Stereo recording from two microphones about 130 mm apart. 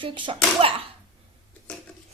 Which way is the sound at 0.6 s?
45° right (ahead or behind).